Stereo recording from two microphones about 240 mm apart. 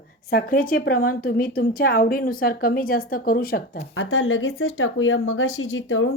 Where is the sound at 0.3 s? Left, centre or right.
Left.